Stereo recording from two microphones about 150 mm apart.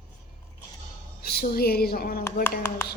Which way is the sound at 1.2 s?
90° left.